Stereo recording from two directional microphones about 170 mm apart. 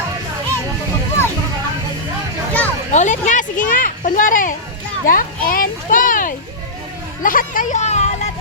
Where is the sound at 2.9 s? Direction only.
45° left (ahead or behind).